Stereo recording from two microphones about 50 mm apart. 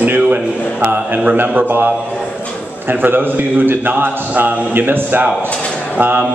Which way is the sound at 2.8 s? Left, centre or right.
Right.